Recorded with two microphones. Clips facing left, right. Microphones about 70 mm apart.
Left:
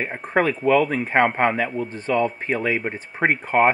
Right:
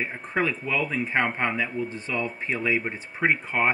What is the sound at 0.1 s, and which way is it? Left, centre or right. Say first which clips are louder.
Speech: left 6 dB; left.